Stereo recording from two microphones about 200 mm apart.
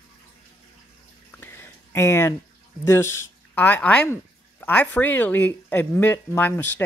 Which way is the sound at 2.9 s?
10° left (ahead or behind).